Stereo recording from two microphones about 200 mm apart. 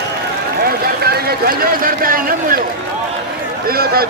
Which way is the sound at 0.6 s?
50° right (ahead or behind).